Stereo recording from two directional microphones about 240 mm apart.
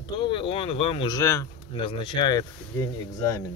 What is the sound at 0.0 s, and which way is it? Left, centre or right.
Speech, left.